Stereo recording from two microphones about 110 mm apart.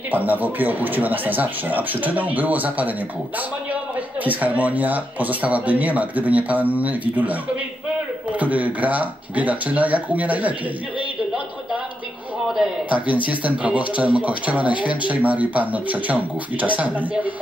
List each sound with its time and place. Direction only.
0.1 s speech: 15° right (ahead or behind)
4.2 s speech: 15° right (ahead or behind)
12.5 s speech: 10° right (ahead or behind)